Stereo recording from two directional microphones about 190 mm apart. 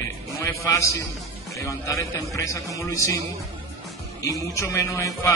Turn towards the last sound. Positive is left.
turn(degrees=15)  # may be behind; listen again after turning